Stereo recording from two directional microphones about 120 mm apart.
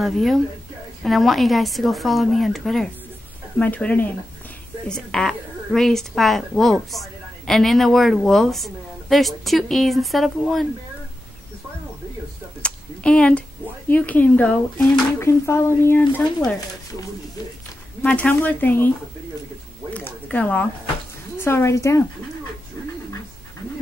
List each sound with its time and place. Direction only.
0.0 s a woman's voice: centre (ahead or behind)
3.5 s a woman's voice: 10° left (ahead or behind)
12.6 s a sound: 10° left (ahead or behind)
13.8 s speech: 15° left (ahead or behind)
15.1 s speech: 20° left (ahead or behind)
18.0 s speech: 10° left (ahead or behind)
19.9 s a sound: 10° left (ahead or behind)
21.4 s speech: 20° left (ahead or behind)